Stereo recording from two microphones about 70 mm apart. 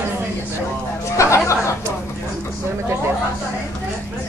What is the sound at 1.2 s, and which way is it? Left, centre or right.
Speech, left.